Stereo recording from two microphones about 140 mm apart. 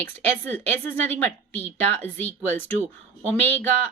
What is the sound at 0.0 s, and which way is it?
A woman's voice, 15° left (ahead or behind).